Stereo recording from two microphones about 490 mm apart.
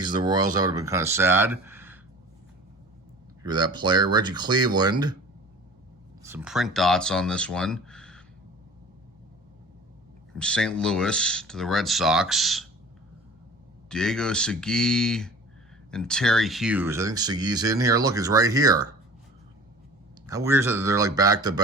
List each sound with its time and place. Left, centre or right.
0.0 s speech: centre
3.4 s speech: centre
6.2 s speech: centre
10.3 s speech: centre
13.9 s speech: centre
20.2 s speech: centre